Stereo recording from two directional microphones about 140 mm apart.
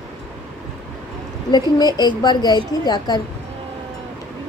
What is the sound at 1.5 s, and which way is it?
A woman's voice, 30° left (ahead or behind).